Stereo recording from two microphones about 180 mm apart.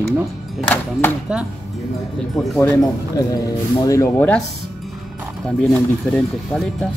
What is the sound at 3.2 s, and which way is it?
Speech, 20° left (ahead or behind).